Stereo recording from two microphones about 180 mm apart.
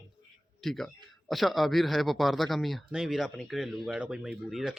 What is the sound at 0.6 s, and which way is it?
A man's voice, centre (ahead or behind).